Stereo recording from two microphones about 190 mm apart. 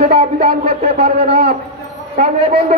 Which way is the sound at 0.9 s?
60° right (ahead or behind).